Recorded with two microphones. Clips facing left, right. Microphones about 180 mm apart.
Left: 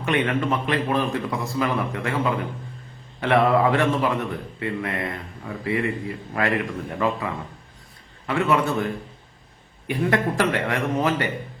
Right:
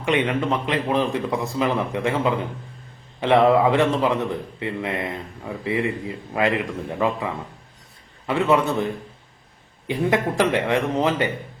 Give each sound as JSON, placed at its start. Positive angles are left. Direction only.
{"t": 0.0, "sound": "a man's voice", "side_deg": -20}
{"t": 8.3, "sound": "a man's voice", "side_deg": -20}